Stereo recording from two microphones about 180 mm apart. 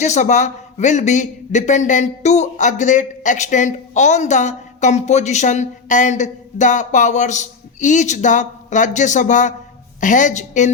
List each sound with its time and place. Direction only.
0.0 s a man's voice: 40° left (ahead or behind)